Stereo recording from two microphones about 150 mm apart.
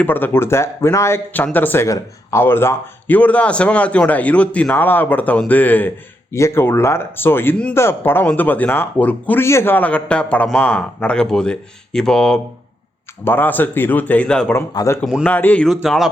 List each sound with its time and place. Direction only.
0.0 s speech: 15° left (ahead or behind)
14.5 s speech: 20° left (ahead or behind)
15.2 s speech: 10° left (ahead or behind)